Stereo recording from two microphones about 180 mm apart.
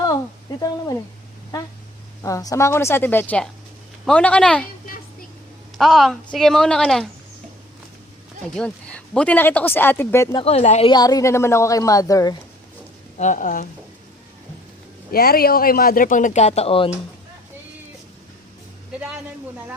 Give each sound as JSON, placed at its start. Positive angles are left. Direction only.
{"t": 2.2, "sound": "speech", "side_deg": 20}
{"t": 5.7, "sound": "a woman's voice", "side_deg": 0}
{"t": 8.5, "sound": "speech", "side_deg": 5}
{"t": 10.3, "sound": "speech", "side_deg": 35}
{"t": 10.9, "sound": "a woman's voice", "side_deg": 20}
{"t": 13.1, "sound": "speech", "side_deg": 45}
{"t": 15.1, "sound": "speech", "side_deg": 55}